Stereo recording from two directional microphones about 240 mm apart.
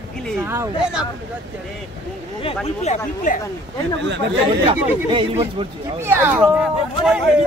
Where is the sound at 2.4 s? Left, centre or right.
Left.